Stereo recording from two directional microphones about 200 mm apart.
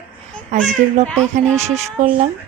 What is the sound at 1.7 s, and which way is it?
Speech, 35° right (ahead or behind).